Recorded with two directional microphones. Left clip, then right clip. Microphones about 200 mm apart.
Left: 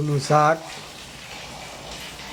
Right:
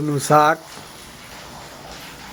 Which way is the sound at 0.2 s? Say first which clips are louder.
Right 3 dB; 25° right (ahead or behind).